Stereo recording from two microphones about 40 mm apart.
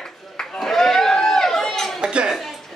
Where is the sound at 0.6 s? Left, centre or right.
Centre.